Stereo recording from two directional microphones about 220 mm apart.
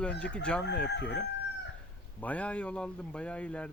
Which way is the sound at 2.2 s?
5° left (ahead or behind).